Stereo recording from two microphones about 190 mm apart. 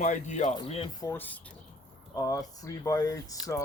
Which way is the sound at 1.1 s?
10° left (ahead or behind).